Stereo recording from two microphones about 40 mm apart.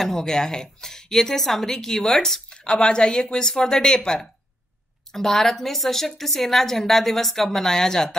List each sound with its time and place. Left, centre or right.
0.0 s a woman's voice: centre